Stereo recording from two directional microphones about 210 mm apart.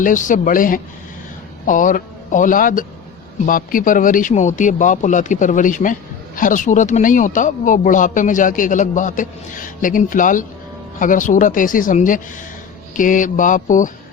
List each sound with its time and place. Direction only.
0.0 s speech: 40° left (ahead or behind)